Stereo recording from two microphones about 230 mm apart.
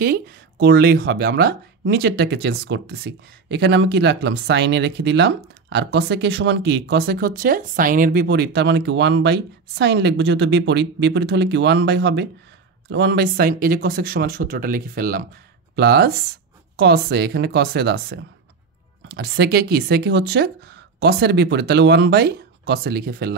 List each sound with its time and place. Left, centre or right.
0.0 s speech: right